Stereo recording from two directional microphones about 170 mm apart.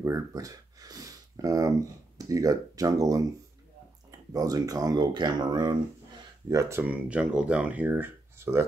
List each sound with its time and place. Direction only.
0.0 s a sound: 20° right (ahead or behind)
2.1 s speech: 20° right (ahead or behind)
4.3 s speech: 20° right (ahead or behind)